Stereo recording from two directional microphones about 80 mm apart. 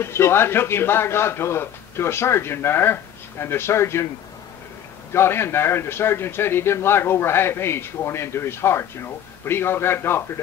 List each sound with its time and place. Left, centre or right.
0.0 s speech: left
5.1 s a man's voice: left